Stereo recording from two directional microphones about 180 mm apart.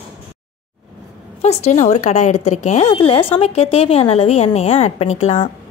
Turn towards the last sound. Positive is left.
turn(degrees=35)  # may be behind; listen again after turning